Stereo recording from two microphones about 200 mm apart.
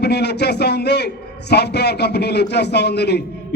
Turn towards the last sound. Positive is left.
turn(degrees=55)  # may be behind; listen again after turning